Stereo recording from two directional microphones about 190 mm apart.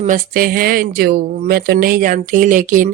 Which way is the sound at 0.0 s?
45° right (ahead or behind).